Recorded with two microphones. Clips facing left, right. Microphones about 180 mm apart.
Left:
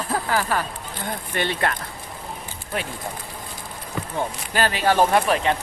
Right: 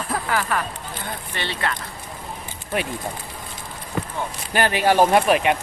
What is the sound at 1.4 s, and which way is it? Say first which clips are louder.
Speech: left 4 dB; 50° left (ahead or behind).